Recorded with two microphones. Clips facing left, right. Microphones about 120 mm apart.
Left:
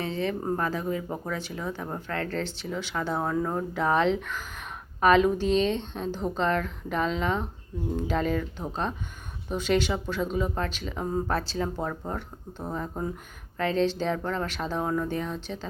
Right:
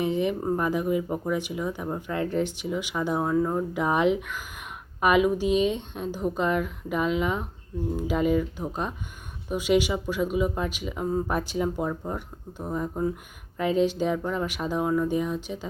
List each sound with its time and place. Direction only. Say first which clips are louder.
0.0 s speech: right 4 dB; 15° right (ahead or behind)
11.3 s speech: right 2 dB; 15° right (ahead or behind)